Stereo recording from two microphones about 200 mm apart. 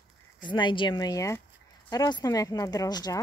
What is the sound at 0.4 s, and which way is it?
A woman's voice, 25° left (ahead or behind).